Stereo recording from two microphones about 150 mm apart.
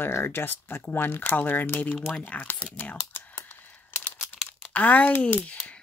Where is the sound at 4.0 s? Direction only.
10° left (ahead or behind).